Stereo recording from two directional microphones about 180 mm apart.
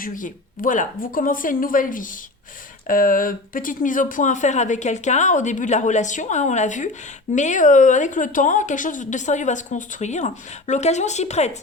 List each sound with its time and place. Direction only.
0.0 s a woman's voice: 50° left (ahead or behind)